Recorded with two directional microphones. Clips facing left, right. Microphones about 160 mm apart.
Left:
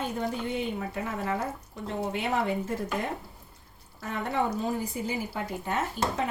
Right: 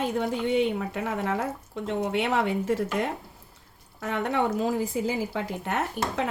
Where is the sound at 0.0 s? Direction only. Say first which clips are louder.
Right 4 dB; 90° right.